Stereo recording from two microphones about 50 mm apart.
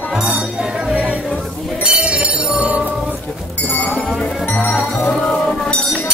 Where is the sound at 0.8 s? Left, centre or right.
Right.